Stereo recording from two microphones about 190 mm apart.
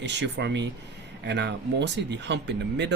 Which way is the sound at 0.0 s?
65° right (ahead or behind).